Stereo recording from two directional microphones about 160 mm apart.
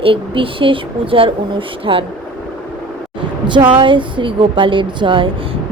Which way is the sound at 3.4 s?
30° right (ahead or behind).